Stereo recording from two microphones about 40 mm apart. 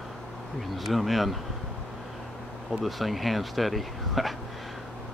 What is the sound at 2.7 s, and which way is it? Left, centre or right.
Speech, centre.